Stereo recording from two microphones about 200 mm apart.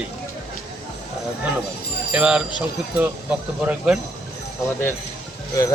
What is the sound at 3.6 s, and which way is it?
Speech, 5° right (ahead or behind).